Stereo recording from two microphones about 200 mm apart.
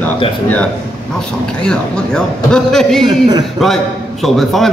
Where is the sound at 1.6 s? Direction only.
5° left (ahead or behind).